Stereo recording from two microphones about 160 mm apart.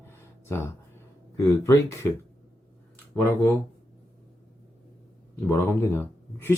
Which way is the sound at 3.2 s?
15° left (ahead or behind).